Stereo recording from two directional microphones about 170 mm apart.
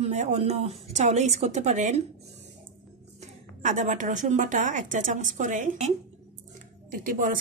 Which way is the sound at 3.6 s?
45° right (ahead or behind).